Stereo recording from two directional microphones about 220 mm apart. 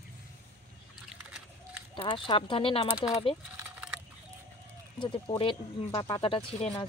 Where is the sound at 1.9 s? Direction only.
20° left (ahead or behind).